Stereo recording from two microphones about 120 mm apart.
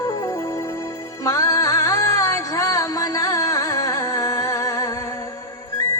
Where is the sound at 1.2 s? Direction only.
30° left (ahead or behind).